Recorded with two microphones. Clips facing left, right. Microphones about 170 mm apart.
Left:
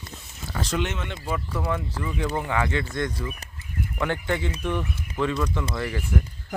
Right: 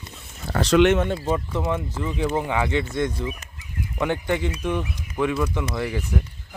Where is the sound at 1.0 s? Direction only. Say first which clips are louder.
Right 8 dB; 40° right (ahead or behind).